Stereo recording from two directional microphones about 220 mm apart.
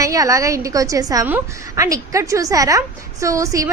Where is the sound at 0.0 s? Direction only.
15° right (ahead or behind).